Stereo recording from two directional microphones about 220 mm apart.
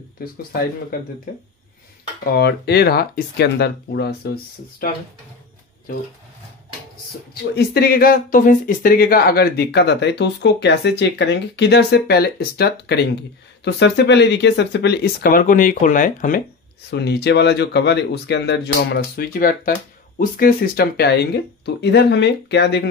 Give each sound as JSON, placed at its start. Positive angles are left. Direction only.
{"t": 0.2, "sound": "speech", "side_deg": 45}
{"t": 2.3, "sound": "speech", "side_deg": 45}
{"t": 7.5, "sound": "speech", "side_deg": 45}
{"t": 16.9, "sound": "speech", "side_deg": 50}